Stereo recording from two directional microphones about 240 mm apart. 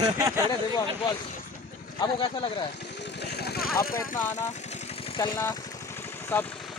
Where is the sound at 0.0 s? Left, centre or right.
Centre.